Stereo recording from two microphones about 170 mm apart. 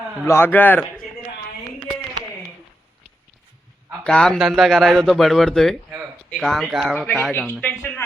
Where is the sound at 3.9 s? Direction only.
5° left (ahead or behind).